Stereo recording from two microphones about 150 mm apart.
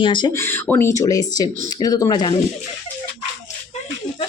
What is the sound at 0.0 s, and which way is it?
Speech, 30° left (ahead or behind).